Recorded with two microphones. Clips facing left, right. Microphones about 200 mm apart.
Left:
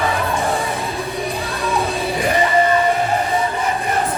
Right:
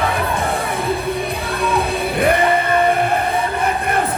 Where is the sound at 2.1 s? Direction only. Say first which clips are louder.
Right 5 dB; 60° right (ahead or behind).